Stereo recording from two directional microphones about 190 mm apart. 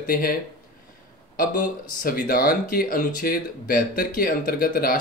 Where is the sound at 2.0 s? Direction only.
50° left (ahead or behind).